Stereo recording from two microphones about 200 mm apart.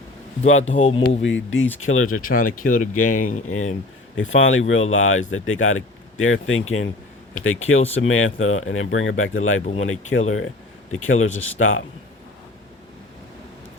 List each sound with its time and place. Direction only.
0.6 s speech: 35° left (ahead or behind)
1.2 s speech: 75° left (ahead or behind)
1.8 s speech: 90° left
2.1 s speech: 45° left (ahead or behind)
4.2 s speech: 75° left (ahead or behind)
4.9 s speech: 90° left